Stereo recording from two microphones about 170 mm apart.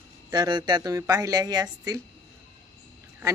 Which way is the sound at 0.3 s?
25° right (ahead or behind).